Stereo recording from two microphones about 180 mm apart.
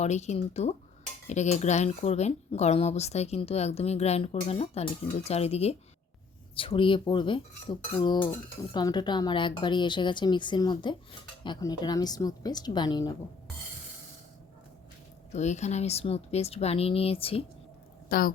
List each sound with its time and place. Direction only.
0.0 s speech: 40° left (ahead or behind); by 13.1 s 25° left (ahead or behind)
15.3 s speech: 40° left (ahead or behind)
18.1 s a woman's voice: 55° left (ahead or behind)